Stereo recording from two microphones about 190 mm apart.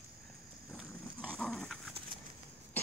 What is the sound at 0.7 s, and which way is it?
Dog, 5° right (ahead or behind).